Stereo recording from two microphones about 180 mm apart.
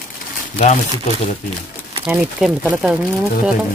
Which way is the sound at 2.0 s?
5° right (ahead or behind).